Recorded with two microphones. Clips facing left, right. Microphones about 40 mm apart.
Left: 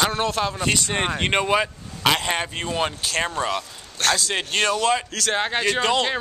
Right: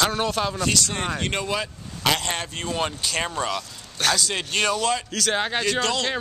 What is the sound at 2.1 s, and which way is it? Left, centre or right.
A man's voice, centre.